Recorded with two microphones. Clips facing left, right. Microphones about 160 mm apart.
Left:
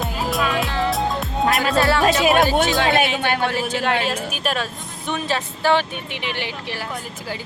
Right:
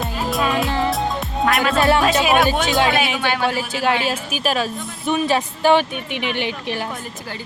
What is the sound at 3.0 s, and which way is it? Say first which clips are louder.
Speech: even; 50° left (ahead or behind).